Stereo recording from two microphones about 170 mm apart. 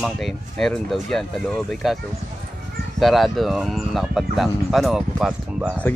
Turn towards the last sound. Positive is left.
turn(degrees=-5)  # may be behind; listen again after turning